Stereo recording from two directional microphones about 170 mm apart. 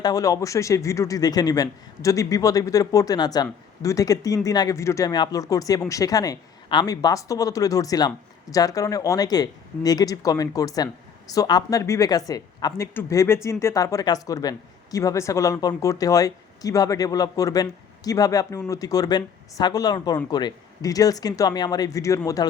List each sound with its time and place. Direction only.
0.0 s speech: 20° left (ahead or behind)